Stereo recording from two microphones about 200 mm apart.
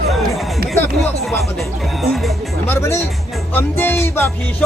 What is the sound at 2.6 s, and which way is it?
Speech, 10° left (ahead or behind).